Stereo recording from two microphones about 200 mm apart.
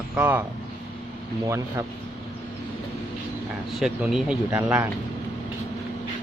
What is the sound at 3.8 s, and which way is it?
Speech, 5° right (ahead or behind).